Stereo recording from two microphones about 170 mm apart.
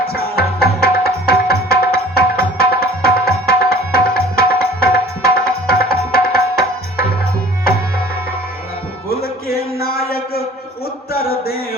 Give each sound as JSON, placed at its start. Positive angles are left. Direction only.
{"t": 0.0, "sound": "music", "side_deg": 65}
{"t": 9.0, "sound": "music", "side_deg": 65}
{"t": 11.1, "sound": "chant", "side_deg": 65}